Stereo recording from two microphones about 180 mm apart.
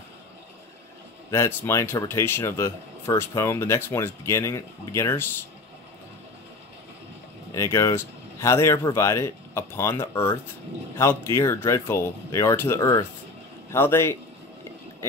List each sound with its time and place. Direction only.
1.3 s speech: 15° left (ahead or behind)
7.5 s speech: 15° left (ahead or behind)